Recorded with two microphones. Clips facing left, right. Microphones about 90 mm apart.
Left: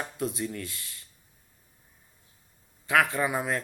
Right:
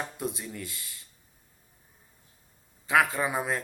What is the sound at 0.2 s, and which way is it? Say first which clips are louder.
Speech: left 3 dB; 15° right (ahead or behind).